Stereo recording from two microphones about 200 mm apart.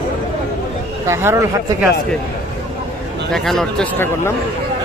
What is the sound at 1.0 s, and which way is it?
Speech, 15° right (ahead or behind).